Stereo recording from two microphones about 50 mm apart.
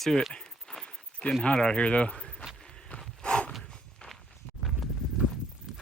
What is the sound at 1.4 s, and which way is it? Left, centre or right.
Speech, centre.